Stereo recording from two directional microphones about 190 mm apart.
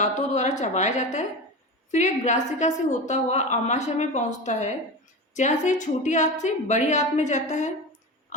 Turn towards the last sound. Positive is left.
turn(degrees=40)  # may be behind; listen again after turning